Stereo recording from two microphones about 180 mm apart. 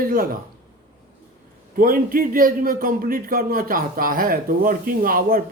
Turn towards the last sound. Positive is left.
turn(degrees=-50)  # may be behind; listen again after turning